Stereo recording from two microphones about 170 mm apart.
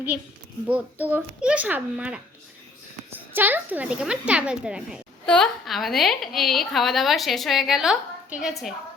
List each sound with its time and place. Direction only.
0.7 s a child's voice: 10° right (ahead or behind)
3.3 s speech: 10° right (ahead or behind)